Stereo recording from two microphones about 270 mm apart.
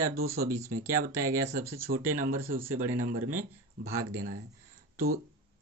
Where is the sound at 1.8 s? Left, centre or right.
Right.